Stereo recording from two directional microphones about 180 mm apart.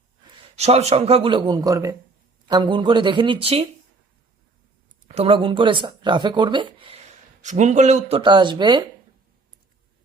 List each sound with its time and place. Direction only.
0.5 s speech: 35° right (ahead or behind)
5.0 s speech: 35° right (ahead or behind)
7.4 s speech: 40° right (ahead or behind); by 8.8 s 25° right (ahead or behind)